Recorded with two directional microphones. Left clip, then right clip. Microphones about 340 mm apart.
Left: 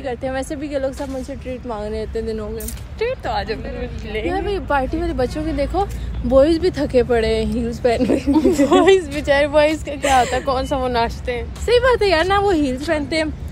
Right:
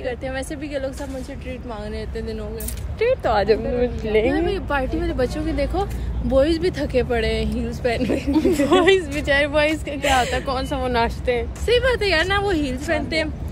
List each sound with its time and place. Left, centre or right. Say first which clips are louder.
0.0 s a woman's voice: left 3 dB; centre
3.0 s speech: right 3 dB; centre
3.3 s speech: right 6 dB; right
4.3 s speech: left 2 dB; centre
8.3 s speech: left 2 dB; centre
11.6 s a woman's voice: left 5 dB; centre